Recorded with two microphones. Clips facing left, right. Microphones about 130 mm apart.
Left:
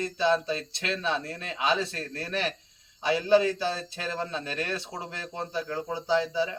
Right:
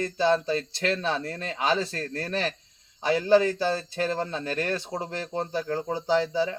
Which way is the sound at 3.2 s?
40° right (ahead or behind).